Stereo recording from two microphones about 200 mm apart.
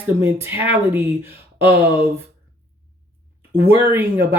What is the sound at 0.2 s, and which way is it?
Speech, 10° right (ahead or behind).